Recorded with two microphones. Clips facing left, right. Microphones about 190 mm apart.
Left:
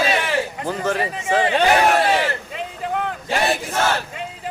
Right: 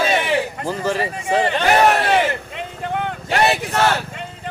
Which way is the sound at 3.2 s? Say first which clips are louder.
Right 4 dB; 65° right (ahead or behind).